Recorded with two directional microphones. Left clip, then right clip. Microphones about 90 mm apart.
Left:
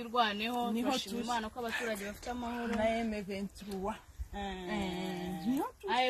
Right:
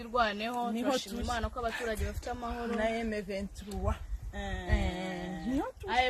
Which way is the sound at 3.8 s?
40° right (ahead or behind).